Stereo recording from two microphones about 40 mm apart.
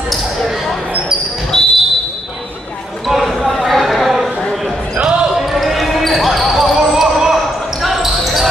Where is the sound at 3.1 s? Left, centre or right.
Centre.